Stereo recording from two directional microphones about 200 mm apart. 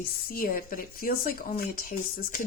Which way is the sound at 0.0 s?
50° left (ahead or behind).